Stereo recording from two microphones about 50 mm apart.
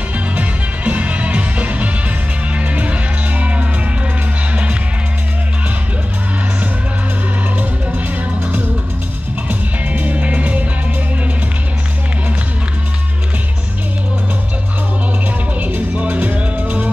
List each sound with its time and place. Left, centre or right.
0.4 s music: right
8.4 s music: right
15.6 s music: right